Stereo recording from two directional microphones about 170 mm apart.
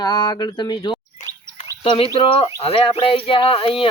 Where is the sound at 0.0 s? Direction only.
25° left (ahead or behind).